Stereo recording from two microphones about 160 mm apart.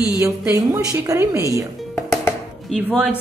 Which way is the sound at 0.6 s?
20° right (ahead or behind).